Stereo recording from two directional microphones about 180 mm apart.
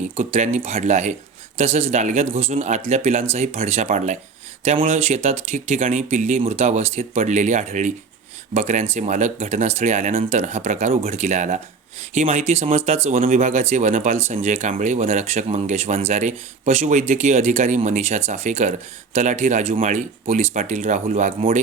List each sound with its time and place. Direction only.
0.2 s speech: 40° right (ahead or behind)